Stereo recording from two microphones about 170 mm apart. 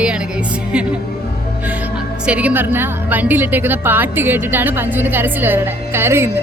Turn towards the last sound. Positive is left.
turn(degrees=-15)  # may be behind; listen again after turning